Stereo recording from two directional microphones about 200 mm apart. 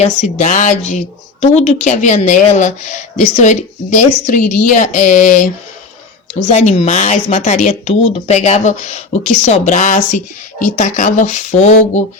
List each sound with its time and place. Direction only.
0.0 s a woman's voice: 35° left (ahead or behind)
6.5 s a woman's voice: 35° left (ahead or behind)